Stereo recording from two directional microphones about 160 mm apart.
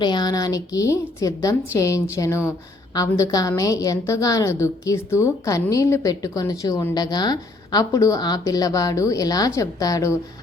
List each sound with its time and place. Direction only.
0.0 s a woman's voice: 25° left (ahead or behind)